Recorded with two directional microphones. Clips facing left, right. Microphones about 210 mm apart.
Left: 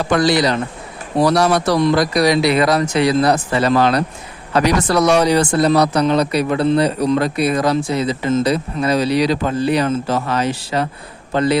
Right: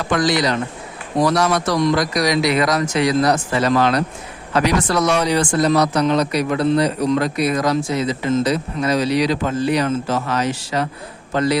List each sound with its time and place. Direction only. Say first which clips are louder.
0.0 s a man's voice: left 3 dB; 35° left (ahead or behind)